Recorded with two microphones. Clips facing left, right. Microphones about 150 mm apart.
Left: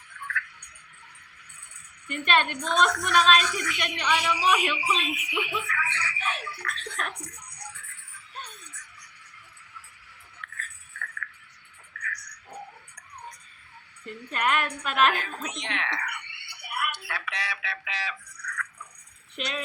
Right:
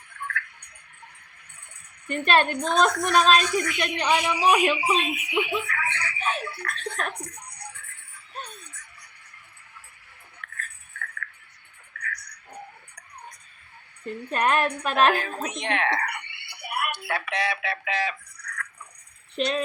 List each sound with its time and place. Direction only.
0.1 s a sound: 50° right (ahead or behind)
2.0 s a woman's voice: 40° right (ahead or behind)
7.7 s music: 50° right (ahead or behind)
8.4 s a sound: 45° right (ahead or behind)
10.4 s music: 50° right (ahead or behind)
11.9 s music: 45° right (ahead or behind)
14.0 s a woman's voice: 45° right (ahead or behind)
15.5 s speech: 55° right (ahead or behind)
16.6 s a sound: 45° right (ahead or behind)
19.4 s a woman's voice: 35° right (ahead or behind)